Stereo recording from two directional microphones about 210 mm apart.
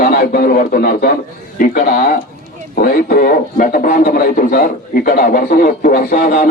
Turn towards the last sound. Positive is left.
turn(degrees=45)  # may be behind; listen again after turning